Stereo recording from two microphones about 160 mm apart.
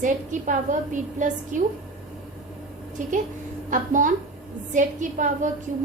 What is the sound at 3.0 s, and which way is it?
A woman's voice, 50° right (ahead or behind).